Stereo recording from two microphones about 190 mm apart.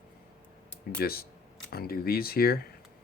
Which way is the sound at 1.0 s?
55° left (ahead or behind).